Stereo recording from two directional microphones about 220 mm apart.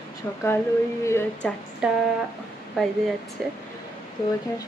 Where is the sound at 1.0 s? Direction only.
10° left (ahead or behind).